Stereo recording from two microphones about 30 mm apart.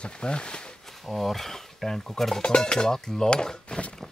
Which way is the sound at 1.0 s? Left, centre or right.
Centre.